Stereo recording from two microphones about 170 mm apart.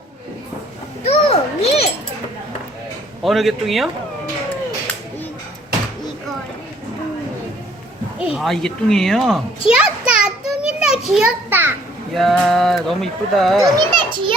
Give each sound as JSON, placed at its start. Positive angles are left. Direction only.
{"t": 1.0, "sound": "children playing", "side_deg": 35}
{"t": 3.2, "sound": "speech", "side_deg": 0}
{"t": 8.2, "sound": "a child's voice", "side_deg": -5}
{"t": 10.1, "sound": "children playing", "side_deg": -5}
{"t": 12.1, "sound": "speech", "side_deg": 0}
{"t": 13.6, "sound": "a child's voice", "side_deg": -25}